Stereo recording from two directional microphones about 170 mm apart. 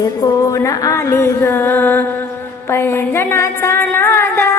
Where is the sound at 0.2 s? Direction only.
20° left (ahead or behind).